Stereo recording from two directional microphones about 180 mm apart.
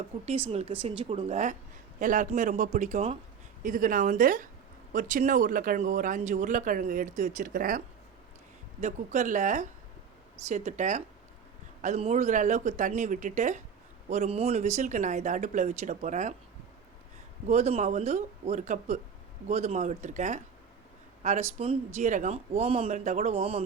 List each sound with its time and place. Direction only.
0.3 s speech: 35° right (ahead or behind)
3.6 s speech: 50° right (ahead or behind)
8.8 s speech: 40° right (ahead or behind)
17.5 s speech: 40° right (ahead or behind)